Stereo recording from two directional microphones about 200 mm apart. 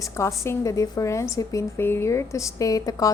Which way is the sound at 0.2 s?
15° left (ahead or behind).